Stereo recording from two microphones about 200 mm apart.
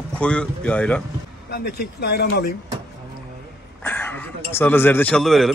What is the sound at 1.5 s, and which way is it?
Speech, 55° left (ahead or behind).